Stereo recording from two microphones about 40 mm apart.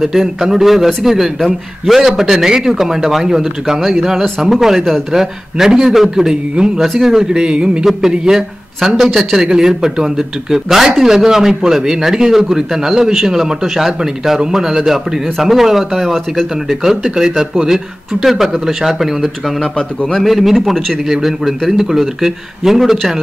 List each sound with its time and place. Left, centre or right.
0.0 s speech: centre
3.8 s a man's voice: centre; by 6.8 s right
6.8 s a man's voice: centre; by 8.5 s right
8.8 s speech: centre
18.2 s speech: centre
19.6 s a man's voice: centre
20.2 s a man's voice: centre
21.1 s speech: centre